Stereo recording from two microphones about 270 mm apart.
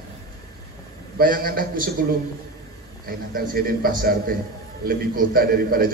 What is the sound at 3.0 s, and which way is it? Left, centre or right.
A man's voice, right.